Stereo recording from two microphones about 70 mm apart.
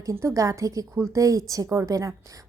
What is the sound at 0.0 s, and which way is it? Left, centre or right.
A woman's voice, right.